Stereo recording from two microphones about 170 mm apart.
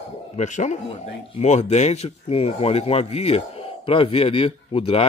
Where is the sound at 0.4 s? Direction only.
45° left (ahead or behind).